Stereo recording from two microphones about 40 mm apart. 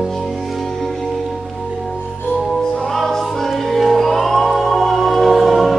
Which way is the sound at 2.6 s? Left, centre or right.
Centre.